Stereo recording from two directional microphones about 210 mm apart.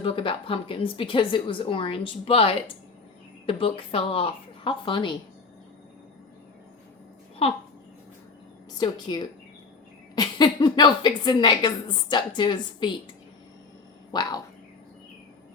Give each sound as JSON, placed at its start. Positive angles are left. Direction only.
{"t": 0.0, "sound": "a woman's voice", "side_deg": 25}
{"t": 7.4, "sound": "a woman's voice", "side_deg": 30}
{"t": 8.8, "sound": "a woman's voice", "side_deg": 20}
{"t": 14.1, "sound": "a woman's voice", "side_deg": 20}